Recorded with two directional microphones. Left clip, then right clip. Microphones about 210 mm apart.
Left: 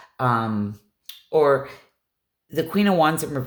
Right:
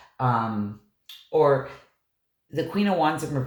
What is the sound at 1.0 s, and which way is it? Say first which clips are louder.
Finger snapping: left 2 dB; 50° left (ahead or behind).